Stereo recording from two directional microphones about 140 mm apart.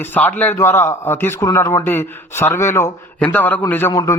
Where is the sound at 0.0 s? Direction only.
15° left (ahead or behind).